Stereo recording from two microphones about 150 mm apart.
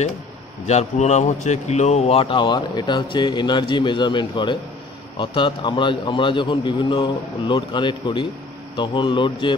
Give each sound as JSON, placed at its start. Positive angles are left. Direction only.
{"t": 0.7, "sound": "speech", "side_deg": 50}